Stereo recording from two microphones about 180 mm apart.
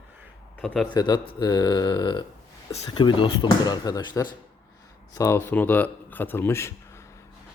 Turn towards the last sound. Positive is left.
turn(degrees=15)  # may be behind; listen again after turning